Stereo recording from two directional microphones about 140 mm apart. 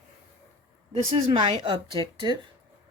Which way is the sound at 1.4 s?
35° right (ahead or behind).